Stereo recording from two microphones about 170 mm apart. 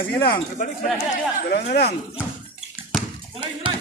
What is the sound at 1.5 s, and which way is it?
Speech, 70° left (ahead or behind).